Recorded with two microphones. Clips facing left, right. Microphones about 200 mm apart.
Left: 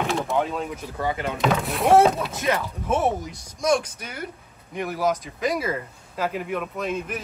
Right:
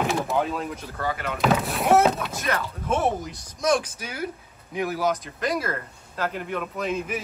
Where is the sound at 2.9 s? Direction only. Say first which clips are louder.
Left 1 dB; centre (ahead or behind).